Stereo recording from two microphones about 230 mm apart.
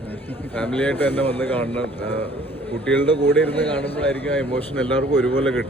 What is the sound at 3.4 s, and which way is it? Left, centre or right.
A man's voice, centre.